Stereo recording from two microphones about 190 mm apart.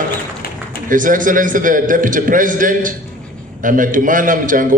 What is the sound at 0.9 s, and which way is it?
A man's voice, 45° right (ahead or behind).